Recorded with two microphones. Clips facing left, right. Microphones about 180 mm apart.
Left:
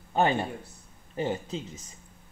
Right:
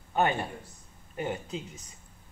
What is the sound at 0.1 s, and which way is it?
Speech, 30° left (ahead or behind).